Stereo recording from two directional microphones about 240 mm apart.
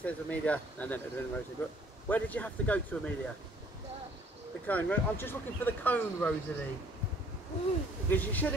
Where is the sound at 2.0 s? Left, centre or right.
Centre.